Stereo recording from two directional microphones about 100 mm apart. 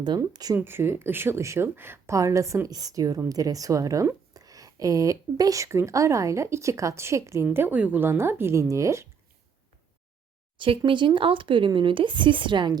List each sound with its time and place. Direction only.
0.2 s speech: 40° right (ahead or behind)
0.5 s speech: 25° right (ahead or behind)
7.5 s speech: 20° right (ahead or behind)
10.6 s speech: 55° right (ahead or behind)